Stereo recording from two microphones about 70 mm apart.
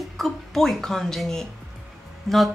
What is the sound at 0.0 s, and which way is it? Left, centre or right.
A woman's voice, centre.